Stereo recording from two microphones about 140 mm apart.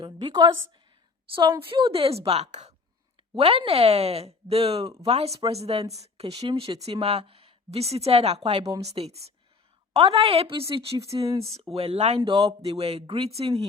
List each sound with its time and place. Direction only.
0.0 s a woman's voice: 30° right (ahead or behind); by 12.2 s 50° right (ahead or behind)
12.2 s speech: 35° right (ahead or behind)
12.8 s a woman's voice: 45° right (ahead or behind)